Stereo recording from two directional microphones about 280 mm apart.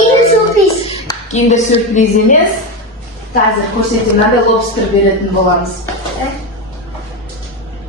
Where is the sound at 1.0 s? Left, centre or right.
Left.